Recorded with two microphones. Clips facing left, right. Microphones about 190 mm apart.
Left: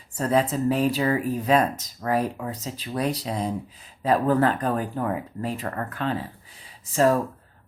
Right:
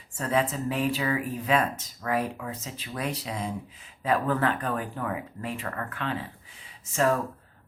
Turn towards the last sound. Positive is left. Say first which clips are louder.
# left 4 dB
turn(degrees=35)  # may be behind; listen again after turning